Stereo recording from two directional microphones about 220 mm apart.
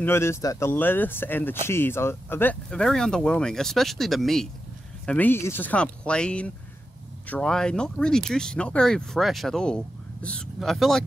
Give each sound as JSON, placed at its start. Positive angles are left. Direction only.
{"t": 0.0, "sound": "speech", "side_deg": 10}